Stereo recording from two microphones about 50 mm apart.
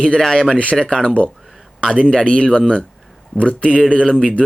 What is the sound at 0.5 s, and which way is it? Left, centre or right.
Speech, left.